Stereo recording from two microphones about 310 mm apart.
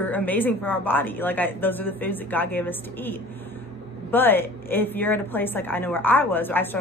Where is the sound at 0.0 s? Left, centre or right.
Centre.